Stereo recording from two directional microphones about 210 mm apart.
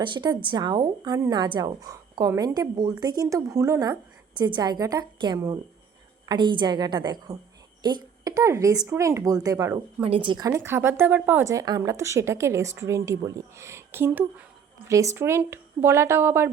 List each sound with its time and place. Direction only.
0.0 s a woman's voice: 20° right (ahead or behind)